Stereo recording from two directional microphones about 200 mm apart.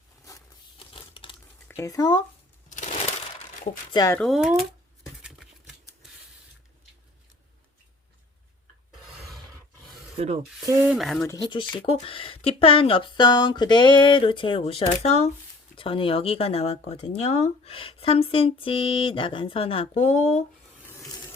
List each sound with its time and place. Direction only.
0.3 s crumpling: 20° left (ahead or behind)
1.6 s speech: 15° left (ahead or behind)
2.6 s crushing: 35° left (ahead or behind)
3.9 s speech: 15° left (ahead or behind)
4.2 s speech: centre (ahead or behind)
5.2 s typewriter: centre (ahead or behind)
10.2 s speech: 30° right (ahead or behind)
10.7 s speech: 10° right (ahead or behind)
10.9 s speech: centre (ahead or behind)
11.2 s speech: 20° left (ahead or behind); by 20.4 s 35° left (ahead or behind)